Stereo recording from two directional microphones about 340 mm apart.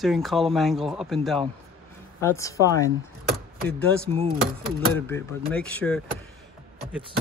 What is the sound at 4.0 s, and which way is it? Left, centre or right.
Speech, centre.